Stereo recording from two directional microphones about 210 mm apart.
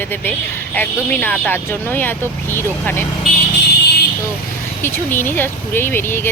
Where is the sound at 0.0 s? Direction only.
10° left (ahead or behind).